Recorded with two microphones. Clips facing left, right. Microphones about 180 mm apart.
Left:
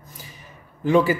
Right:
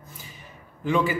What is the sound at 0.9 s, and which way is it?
Speech, 40° left (ahead or behind).